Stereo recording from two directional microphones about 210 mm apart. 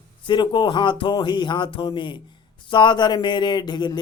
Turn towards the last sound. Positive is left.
turn(degrees=20)  # may be behind; listen again after turning